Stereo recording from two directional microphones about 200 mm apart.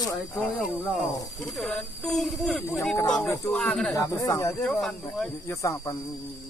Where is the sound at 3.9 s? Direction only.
20° left (ahead or behind).